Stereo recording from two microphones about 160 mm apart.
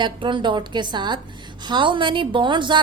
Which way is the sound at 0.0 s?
30° right (ahead or behind).